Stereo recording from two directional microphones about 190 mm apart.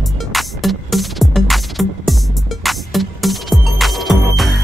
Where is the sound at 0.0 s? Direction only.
Centre (ahead or behind).